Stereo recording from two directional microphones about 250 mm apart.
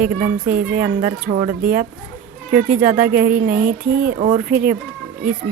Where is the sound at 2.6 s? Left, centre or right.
Centre.